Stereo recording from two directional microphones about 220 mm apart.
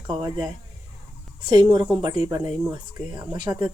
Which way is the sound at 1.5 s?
20° right (ahead or behind).